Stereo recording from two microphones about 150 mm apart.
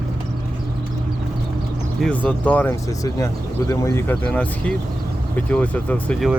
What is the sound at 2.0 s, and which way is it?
Speech, 10° left (ahead or behind).